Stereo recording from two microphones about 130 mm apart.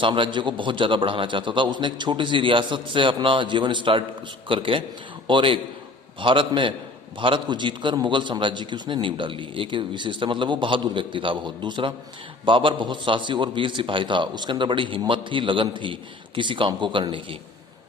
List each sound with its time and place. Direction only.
0.0 s a man's voice: 40° right (ahead or behind)